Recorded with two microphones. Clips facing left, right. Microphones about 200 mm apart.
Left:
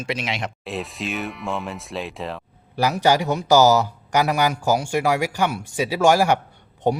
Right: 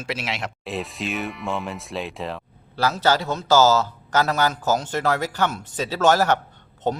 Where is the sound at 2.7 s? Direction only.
15° left (ahead or behind).